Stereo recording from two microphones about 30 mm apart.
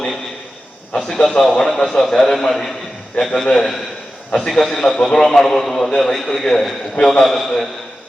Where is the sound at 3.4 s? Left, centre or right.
Left.